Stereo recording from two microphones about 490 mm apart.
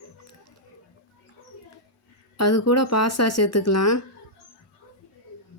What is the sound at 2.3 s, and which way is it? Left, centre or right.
Speech, left.